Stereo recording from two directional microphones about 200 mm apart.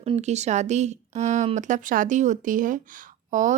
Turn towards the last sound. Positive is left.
turn(degrees=-40)  # may be behind; listen again after turning